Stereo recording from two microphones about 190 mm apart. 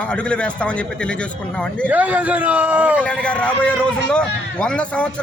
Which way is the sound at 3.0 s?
5° left (ahead or behind).